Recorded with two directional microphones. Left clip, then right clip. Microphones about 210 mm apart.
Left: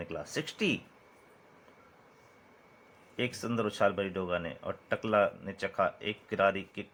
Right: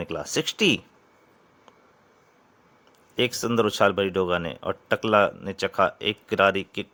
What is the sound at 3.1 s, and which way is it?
Speech, 50° right (ahead or behind).